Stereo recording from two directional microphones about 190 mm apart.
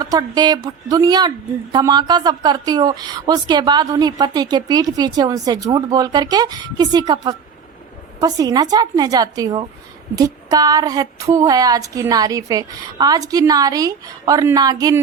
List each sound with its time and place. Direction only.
0.0 s speech: 20° right (ahead or behind)